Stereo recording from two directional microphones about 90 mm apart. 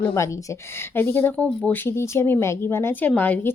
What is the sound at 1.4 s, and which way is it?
Speech, 15° left (ahead or behind).